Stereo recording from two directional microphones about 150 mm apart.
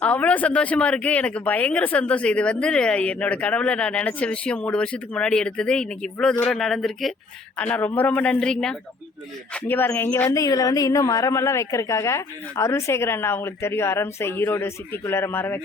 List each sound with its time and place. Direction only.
0.0 s speech: 10° left (ahead or behind)